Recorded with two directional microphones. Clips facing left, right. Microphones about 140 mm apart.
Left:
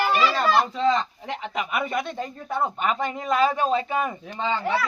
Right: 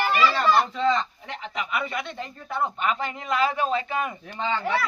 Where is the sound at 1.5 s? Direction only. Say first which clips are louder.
Left 2 dB; 50° left (ahead or behind).